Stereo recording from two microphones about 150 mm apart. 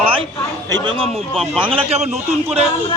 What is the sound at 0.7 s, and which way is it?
Speech, 35° right (ahead or behind).